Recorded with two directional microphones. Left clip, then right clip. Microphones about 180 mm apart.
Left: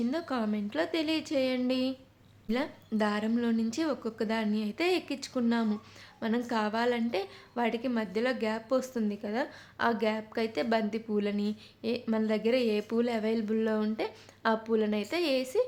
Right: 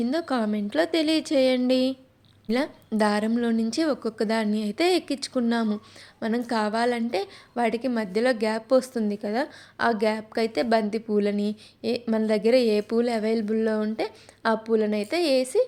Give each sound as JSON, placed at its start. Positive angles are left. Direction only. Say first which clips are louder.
{"t": 0.0, "sound": "a woman's voice", "louder": "right 6 dB", "side_deg": -30}